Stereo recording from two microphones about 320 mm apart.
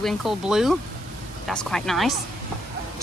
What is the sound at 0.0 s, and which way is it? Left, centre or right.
Speech, centre.